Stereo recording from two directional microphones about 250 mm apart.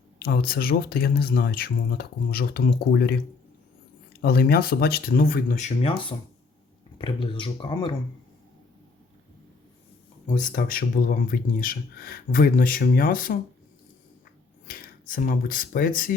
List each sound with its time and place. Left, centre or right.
0.2 s speech: left
4.2 s speech: left; by 7.9 s centre
10.2 s speech: left
14.7 s speech: left